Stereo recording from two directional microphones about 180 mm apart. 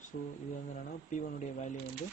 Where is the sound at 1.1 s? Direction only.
45° left (ahead or behind).